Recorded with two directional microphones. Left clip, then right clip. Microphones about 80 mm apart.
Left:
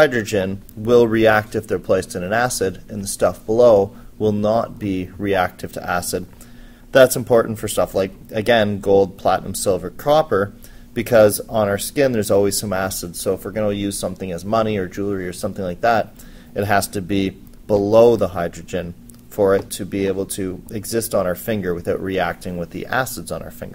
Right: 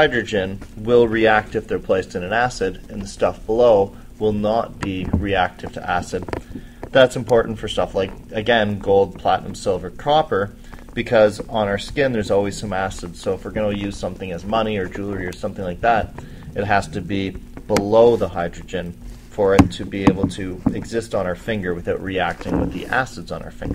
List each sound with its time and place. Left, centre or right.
0.0 s speech: left
4.2 s speech: left
7.8 s speech: left
15.2 s speech: left